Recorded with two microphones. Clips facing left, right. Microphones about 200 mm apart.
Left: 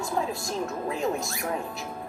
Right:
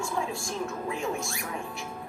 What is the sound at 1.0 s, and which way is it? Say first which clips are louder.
Speech: left 3 dB; 40° left (ahead or behind).